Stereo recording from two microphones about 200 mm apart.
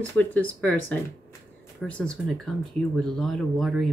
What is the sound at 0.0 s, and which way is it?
Speech, 10° left (ahead or behind).